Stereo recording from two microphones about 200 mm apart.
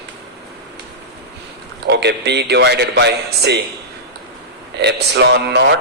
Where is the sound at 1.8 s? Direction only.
55° right (ahead or behind).